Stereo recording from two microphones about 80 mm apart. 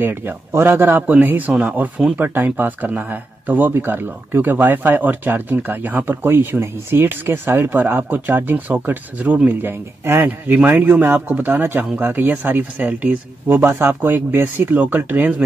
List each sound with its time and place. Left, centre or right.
0.0 s speech: right